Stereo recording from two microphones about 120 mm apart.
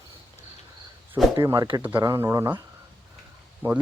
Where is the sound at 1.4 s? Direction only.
25° right (ahead or behind).